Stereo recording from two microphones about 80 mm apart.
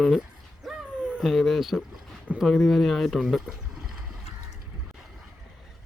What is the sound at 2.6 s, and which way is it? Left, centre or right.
Speech, centre.